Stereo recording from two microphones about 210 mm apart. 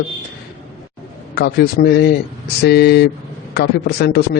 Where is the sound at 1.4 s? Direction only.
45° left (ahead or behind).